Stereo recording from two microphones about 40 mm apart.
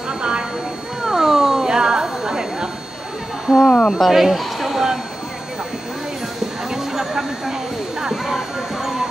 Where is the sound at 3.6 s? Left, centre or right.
Centre.